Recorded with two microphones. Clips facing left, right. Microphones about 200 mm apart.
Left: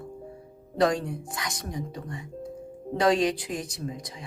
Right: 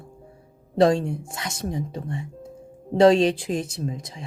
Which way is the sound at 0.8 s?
25° right (ahead or behind).